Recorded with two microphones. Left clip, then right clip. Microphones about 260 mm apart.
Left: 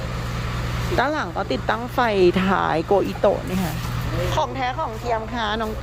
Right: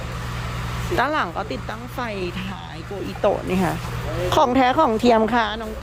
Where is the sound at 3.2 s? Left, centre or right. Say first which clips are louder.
Right 1 dB; centre.